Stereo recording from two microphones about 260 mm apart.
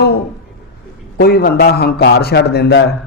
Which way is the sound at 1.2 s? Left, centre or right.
Left.